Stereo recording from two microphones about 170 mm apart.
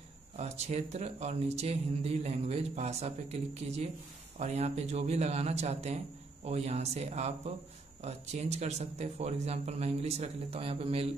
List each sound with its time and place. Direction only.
0.4 s speech: 40° right (ahead or behind)